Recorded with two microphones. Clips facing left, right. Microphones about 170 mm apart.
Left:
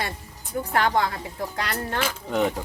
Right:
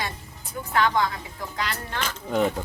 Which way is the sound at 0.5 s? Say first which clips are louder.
Left 1 dB; 45° left (ahead or behind).